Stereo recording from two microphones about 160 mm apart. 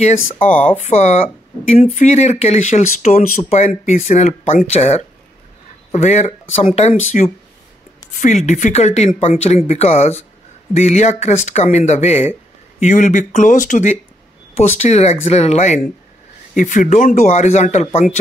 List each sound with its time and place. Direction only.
0.0 s a woman's voice: 45° left (ahead or behind)